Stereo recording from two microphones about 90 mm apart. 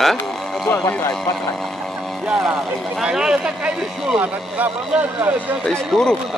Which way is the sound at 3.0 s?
5° right (ahead or behind).